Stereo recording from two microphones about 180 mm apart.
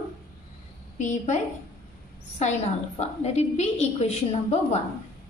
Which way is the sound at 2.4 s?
40° left (ahead or behind).